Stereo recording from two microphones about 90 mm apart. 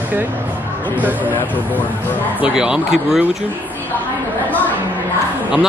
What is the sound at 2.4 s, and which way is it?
Speech, 10° right (ahead or behind).